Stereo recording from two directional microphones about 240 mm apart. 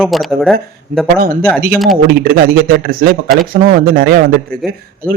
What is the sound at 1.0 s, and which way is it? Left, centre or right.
A man's voice, right.